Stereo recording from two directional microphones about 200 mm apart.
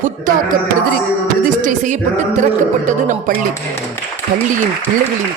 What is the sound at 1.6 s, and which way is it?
Speech, 40° right (ahead or behind).